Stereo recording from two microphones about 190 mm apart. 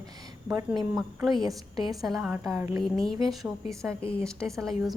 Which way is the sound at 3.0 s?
Centre (ahead or behind).